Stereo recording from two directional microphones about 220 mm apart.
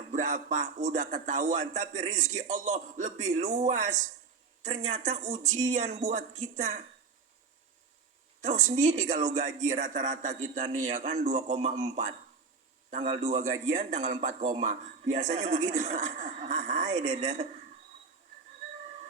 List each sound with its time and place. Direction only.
0.1 s a man's voice: 35° right (ahead or behind)
5.0 s a man's voice: 35° right (ahead or behind)
8.4 s a woman's voice: 30° right (ahead or behind)